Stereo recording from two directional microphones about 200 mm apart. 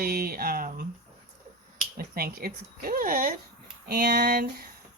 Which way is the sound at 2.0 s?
50° right (ahead or behind).